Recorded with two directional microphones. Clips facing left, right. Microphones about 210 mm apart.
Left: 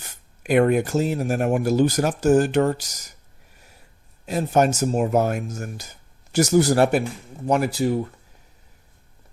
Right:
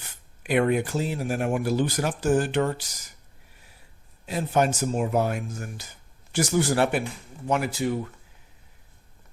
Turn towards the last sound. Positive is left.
turn(degrees=40)  # may be behind; listen again after turning